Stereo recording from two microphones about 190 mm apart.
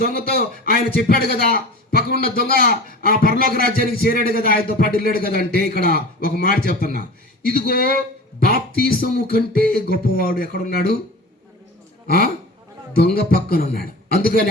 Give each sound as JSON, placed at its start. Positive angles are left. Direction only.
{"t": 0.0, "sound": "a man's voice", "side_deg": 55}
{"t": 12.0, "sound": "a man's voice", "side_deg": 50}